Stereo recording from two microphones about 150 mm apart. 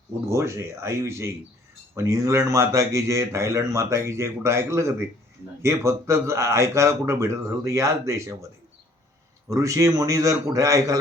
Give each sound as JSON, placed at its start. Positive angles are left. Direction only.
{"t": 0.3, "sound": "a man's voice", "side_deg": -15}
{"t": 9.5, "sound": "a man's voice", "side_deg": -20}